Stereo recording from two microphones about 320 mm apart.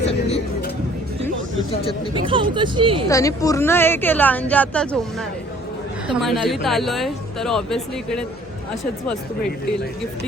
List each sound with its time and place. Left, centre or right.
0.0 s speech: centre
2.1 s speech: centre
3.1 s speech: centre
6.2 s speech: centre